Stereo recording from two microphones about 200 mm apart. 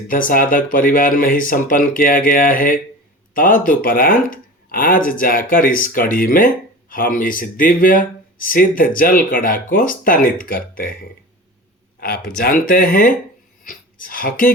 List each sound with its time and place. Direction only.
0.1 s speech: 45° left (ahead or behind)
11.9 s speech: 50° left (ahead or behind)